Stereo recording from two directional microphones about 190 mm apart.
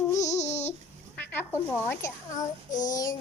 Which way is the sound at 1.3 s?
10° left (ahead or behind).